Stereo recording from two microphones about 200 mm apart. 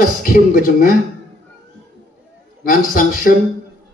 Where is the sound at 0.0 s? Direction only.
45° left (ahead or behind).